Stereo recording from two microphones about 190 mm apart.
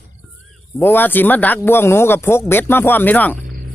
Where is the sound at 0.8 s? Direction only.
10° left (ahead or behind).